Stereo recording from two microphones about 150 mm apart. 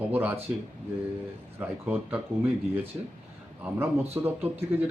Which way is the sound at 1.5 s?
15° right (ahead or behind).